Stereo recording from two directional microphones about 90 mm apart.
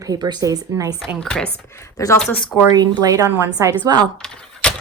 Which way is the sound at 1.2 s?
10° left (ahead or behind).